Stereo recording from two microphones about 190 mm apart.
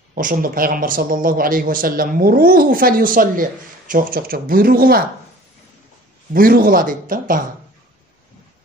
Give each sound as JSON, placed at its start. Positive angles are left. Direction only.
{"t": 0.1, "sound": "speech", "side_deg": -45}
{"t": 6.3, "sound": "speech", "side_deg": -50}